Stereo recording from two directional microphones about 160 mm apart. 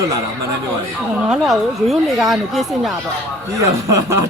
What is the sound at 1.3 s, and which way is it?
Speech, 5° right (ahead or behind).